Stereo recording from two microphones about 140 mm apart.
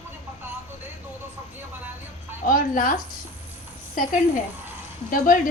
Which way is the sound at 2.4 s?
75° left (ahead or behind).